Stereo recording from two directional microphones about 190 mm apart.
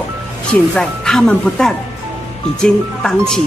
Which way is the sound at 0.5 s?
5° left (ahead or behind).